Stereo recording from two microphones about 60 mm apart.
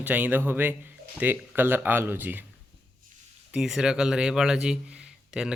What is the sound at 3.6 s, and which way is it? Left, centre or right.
Speech, centre.